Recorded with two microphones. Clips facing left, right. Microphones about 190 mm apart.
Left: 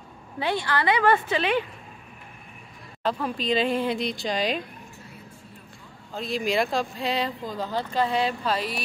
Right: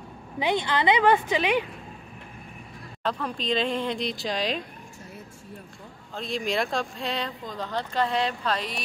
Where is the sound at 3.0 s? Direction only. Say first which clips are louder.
Left 2 dB; 5° left (ahead or behind).